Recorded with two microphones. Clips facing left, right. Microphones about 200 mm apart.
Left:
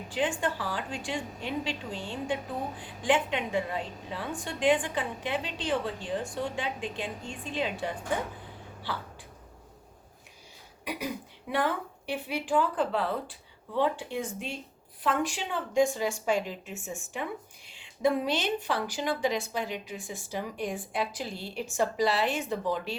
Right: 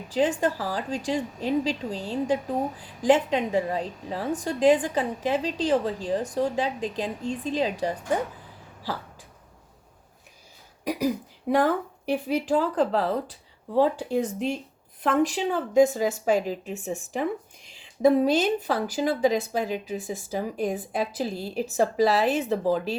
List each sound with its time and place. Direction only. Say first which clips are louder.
0.1 s a woman's voice: right 6 dB; 40° right (ahead or behind)
10.8 s a woman's voice: right 9 dB; 40° right (ahead or behind)